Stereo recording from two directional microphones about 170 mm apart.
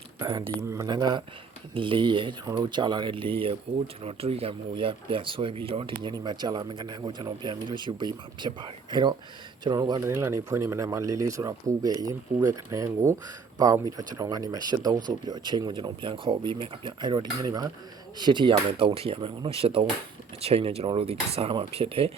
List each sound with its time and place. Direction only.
0.2 s speech: 25° right (ahead or behind)